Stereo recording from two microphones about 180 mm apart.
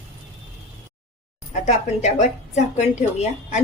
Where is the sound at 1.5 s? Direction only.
40° left (ahead or behind).